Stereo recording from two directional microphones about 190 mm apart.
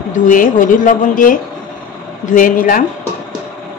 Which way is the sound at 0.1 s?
45° left (ahead or behind).